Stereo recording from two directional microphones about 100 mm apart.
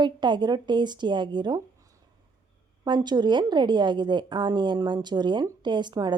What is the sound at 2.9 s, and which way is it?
A woman's voice, 45° right (ahead or behind).